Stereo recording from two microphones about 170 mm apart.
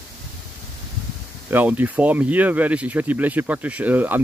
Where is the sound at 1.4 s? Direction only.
10° right (ahead or behind).